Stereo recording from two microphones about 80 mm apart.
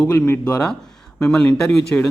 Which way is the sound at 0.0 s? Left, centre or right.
Centre.